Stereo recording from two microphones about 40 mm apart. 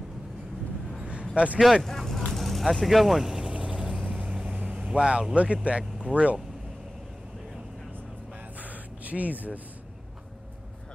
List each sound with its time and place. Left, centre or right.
1.3 s speech: right
1.6 s speech: centre
1.9 s vehicle: centre
4.6 s vehicle: right
5.3 s speech: right
8.5 s gasp: right